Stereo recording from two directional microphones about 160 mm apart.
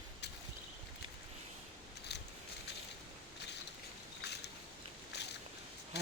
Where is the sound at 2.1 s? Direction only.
90° left.